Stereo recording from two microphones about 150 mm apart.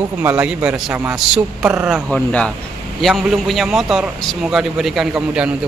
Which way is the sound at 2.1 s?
5° left (ahead or behind).